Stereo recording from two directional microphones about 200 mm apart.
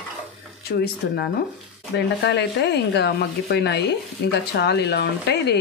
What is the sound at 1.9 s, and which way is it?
Speech, 60° left (ahead or behind).